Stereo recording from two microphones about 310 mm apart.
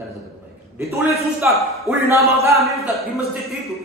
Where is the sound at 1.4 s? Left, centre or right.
Centre.